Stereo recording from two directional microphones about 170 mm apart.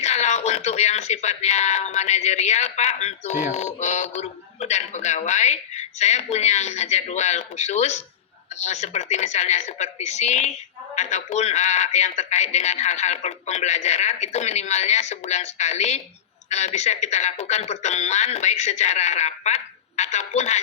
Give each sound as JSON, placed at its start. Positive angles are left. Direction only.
{"t": 0.0, "sound": "a woman's voice", "side_deg": 40}